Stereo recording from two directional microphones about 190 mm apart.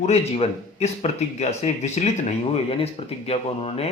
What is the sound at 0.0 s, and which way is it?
Speech, 35° left (ahead or behind).